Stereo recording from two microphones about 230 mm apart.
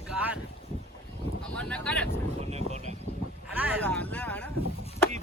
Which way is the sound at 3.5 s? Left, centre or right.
Centre.